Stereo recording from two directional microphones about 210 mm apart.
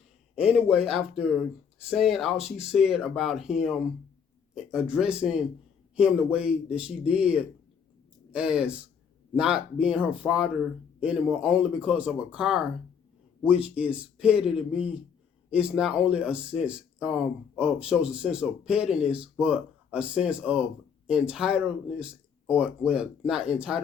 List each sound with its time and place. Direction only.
0.5 s speech: 5° right (ahead or behind)